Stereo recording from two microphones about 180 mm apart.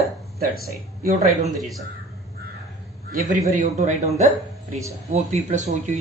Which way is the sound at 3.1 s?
40° right (ahead or behind).